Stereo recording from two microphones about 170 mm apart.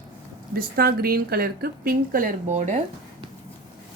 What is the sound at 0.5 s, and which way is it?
Speech, 60° right (ahead or behind).